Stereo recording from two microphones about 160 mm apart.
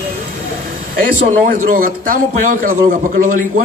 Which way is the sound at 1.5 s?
60° right (ahead or behind).